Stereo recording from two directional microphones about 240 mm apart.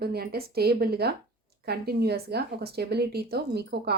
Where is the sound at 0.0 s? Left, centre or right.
Right.